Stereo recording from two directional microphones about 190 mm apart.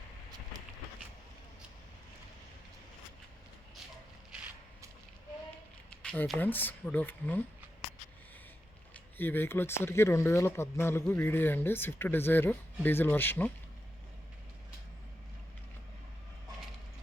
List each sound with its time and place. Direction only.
4.3 s a sound: 5° right (ahead or behind)
6.0 s speech: 5° left (ahead or behind)
8.9 s speech: 10° left (ahead or behind)